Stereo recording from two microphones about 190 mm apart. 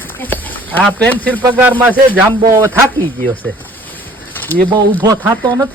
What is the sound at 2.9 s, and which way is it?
Speech, 10° left (ahead or behind).